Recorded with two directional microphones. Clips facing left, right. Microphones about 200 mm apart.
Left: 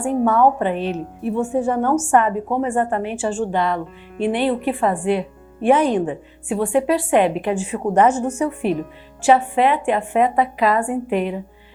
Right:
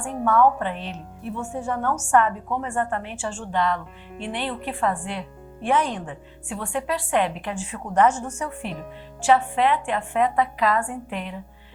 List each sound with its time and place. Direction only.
0.0 s a woman's voice: 20° left (ahead or behind)
0.6 s a woman's voice: 10° left (ahead or behind)
9.2 s a woman's voice: 10° left (ahead or behind)